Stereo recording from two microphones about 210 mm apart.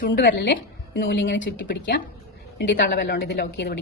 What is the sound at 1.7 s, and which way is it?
A woman's voice, 50° left (ahead or behind).